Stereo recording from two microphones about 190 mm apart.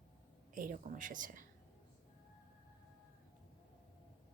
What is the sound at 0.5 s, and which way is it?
Speech, 45° right (ahead or behind).